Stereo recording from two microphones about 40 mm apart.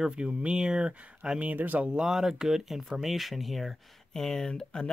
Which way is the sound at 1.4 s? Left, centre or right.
Right.